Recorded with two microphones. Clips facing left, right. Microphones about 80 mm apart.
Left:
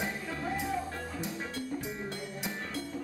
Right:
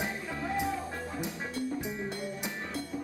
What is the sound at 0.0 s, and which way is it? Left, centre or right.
Music, centre.